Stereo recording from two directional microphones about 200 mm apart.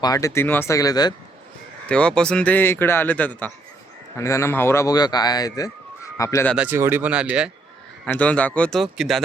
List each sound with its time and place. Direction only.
0.0 s speech: 15° left (ahead or behind)
1.9 s speech: 5° left (ahead or behind)
6.5 s speech: 5° right (ahead or behind)
8.0 s speech: 5° left (ahead or behind)